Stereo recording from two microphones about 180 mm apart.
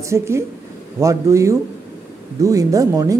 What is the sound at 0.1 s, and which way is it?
Speech, 15° right (ahead or behind).